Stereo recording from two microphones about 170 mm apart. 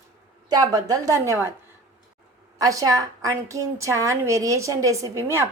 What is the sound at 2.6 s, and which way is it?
A woman's voice, 20° right (ahead or behind).